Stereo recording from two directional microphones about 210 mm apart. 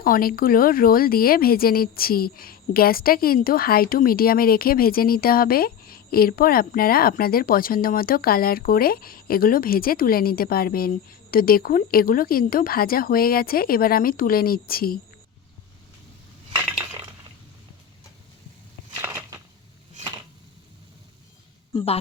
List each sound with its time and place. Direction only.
0.0 s speech: 45° left (ahead or behind)
19.0 s a sound: 10° right (ahead or behind)
21.7 s speech: 25° left (ahead or behind)